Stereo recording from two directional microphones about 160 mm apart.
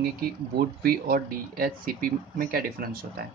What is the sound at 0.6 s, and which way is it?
Speech, 70° right (ahead or behind).